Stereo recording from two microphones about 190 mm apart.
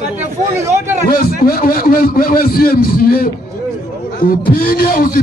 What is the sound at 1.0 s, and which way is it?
A man's voice, 50° left (ahead or behind).